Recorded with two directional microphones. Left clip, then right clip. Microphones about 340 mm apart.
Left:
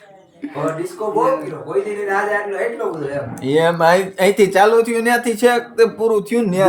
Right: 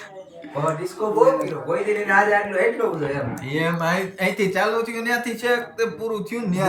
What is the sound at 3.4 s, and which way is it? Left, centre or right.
Speech, centre.